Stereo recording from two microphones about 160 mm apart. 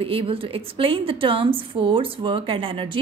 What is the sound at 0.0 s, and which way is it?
A woman's voice, 35° right (ahead or behind).